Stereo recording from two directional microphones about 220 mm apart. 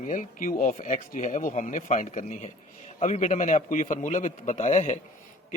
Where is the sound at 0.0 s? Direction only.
35° left (ahead or behind).